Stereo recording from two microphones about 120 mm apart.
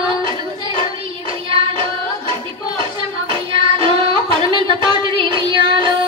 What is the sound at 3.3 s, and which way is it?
Child singing, 45° right (ahead or behind).